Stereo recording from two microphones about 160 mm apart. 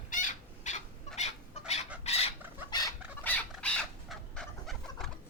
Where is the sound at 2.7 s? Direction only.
25° left (ahead or behind).